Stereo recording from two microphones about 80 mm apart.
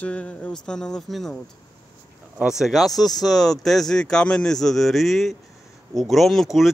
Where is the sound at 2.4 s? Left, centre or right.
Centre.